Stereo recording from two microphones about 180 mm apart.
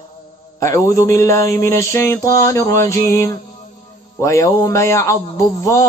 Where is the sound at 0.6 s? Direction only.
15° left (ahead or behind).